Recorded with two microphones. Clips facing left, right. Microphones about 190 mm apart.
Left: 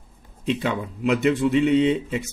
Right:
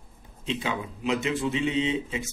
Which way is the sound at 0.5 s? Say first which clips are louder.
Left 6 dB; 65° left (ahead or behind).